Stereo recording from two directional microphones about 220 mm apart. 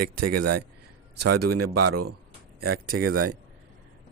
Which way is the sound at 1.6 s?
90° right.